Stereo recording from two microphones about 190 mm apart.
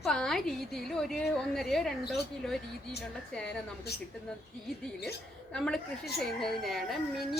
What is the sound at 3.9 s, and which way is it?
Speech, 55° left (ahead or behind).